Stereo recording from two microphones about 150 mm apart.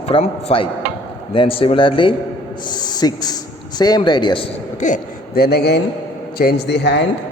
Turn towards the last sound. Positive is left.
turn(degrees=90)